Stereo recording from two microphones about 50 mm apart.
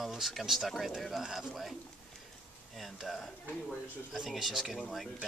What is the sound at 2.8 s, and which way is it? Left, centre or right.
Speech, centre.